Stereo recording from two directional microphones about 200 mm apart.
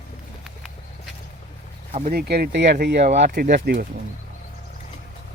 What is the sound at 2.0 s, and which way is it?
Speech, 55° right (ahead or behind).